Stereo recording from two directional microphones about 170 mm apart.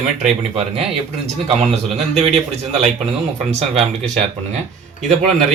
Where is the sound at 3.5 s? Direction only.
40° right (ahead or behind).